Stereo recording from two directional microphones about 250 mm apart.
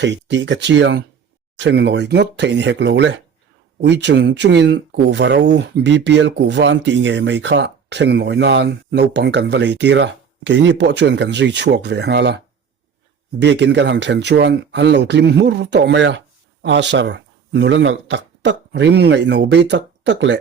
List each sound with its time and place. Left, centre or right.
0.0 s speech: right
13.4 s speech: right